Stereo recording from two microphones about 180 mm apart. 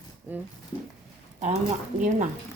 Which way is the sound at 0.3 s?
10° right (ahead or behind).